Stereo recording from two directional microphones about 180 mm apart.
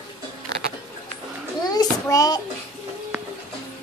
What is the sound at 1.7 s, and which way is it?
Child singing, 20° left (ahead or behind).